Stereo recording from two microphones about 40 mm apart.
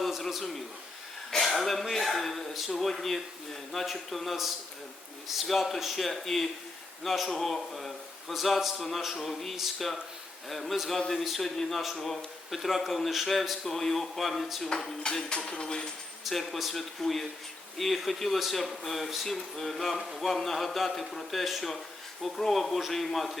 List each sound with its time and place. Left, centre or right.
0.0 s a sound: centre
1.5 s speech: centre
11.4 s dishes: centre
11.8 s speech: centre
14.8 s dishes: centre
15.3 s dishes: left
16.2 s speech: centre